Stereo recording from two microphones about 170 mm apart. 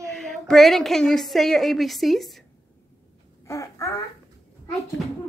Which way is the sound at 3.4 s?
20° left (ahead or behind).